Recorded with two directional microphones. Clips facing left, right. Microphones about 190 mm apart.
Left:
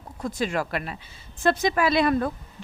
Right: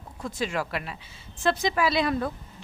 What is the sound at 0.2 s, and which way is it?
A woman's voice, 45° left (ahead or behind).